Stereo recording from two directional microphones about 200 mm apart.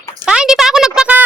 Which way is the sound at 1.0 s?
5° right (ahead or behind).